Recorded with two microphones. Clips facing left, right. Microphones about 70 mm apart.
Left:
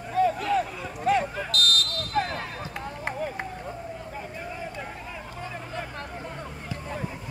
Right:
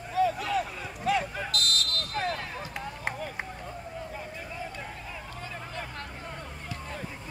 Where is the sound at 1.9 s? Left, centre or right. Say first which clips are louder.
Left 4 dB; left.